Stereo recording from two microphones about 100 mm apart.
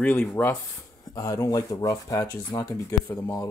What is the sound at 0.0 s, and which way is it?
Speech, 20° left (ahead or behind).